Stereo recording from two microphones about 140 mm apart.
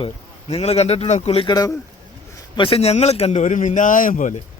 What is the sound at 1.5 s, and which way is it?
Speech, 30° left (ahead or behind).